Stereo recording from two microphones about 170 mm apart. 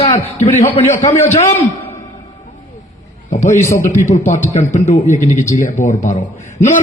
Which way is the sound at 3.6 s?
15° left (ahead or behind).